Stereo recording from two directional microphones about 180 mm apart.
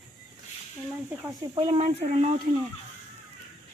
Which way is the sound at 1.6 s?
35° right (ahead or behind).